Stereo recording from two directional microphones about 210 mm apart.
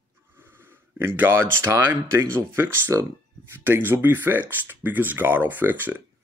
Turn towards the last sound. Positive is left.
turn(degrees=-10)  # may be behind; listen again after turning